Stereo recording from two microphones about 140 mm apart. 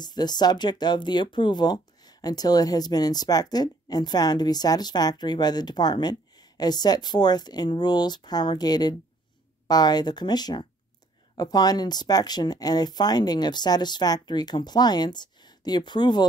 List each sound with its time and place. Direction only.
0.0 s speech: 30° left (ahead or behind)